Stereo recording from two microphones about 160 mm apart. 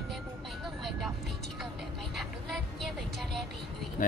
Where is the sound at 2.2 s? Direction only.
Centre (ahead or behind).